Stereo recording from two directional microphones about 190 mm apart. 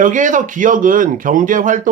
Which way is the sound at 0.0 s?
40° right (ahead or behind).